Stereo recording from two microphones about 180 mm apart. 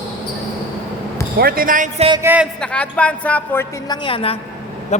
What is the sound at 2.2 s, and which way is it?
Speech, 10° right (ahead or behind).